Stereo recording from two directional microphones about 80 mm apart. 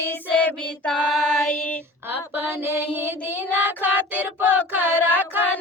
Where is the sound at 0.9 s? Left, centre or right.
Centre.